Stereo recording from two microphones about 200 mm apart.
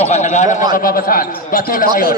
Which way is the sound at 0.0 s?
35° left (ahead or behind).